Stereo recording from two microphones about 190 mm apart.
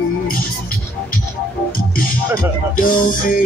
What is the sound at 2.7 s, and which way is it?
Music, 45° left (ahead or behind).